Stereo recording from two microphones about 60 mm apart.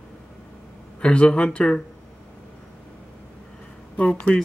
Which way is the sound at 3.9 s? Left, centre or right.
Left.